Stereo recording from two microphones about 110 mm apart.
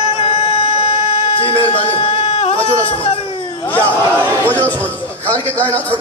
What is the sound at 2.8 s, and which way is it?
Speech, 60° left (ahead or behind).